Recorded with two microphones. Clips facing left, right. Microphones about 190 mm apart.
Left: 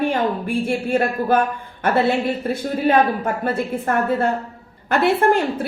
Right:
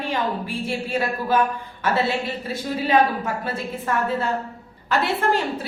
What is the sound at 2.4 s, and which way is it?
Speech, 55° left (ahead or behind).